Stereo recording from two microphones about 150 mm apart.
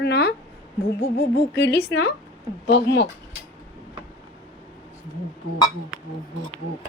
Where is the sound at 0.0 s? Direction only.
90° left.